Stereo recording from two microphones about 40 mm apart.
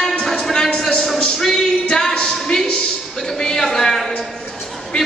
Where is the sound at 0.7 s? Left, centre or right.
Centre.